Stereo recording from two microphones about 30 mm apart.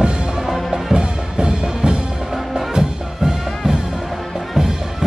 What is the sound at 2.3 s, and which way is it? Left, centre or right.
Music, centre.